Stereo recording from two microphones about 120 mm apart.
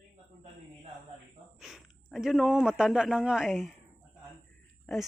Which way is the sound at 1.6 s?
Centre (ahead or behind).